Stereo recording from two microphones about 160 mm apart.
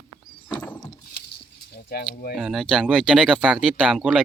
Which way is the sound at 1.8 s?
70° left (ahead or behind).